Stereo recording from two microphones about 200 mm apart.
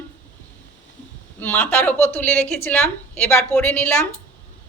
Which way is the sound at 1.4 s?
10° left (ahead or behind).